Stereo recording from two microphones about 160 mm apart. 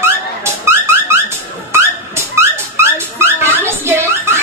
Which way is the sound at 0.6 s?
15° right (ahead or behind).